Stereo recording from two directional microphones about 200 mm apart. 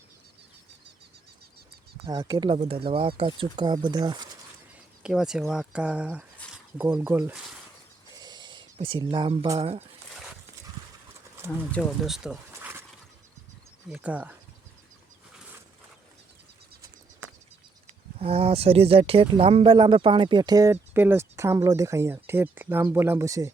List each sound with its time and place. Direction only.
2.0 s speech: 20° right (ahead or behind)
5.0 s speech: 5° right (ahead or behind)
8.1 s a sound: 20° right (ahead or behind)
11.7 s speech: 5° left (ahead or behind)
13.8 s speech: 5° right (ahead or behind)
18.2 s speech: 30° right (ahead or behind)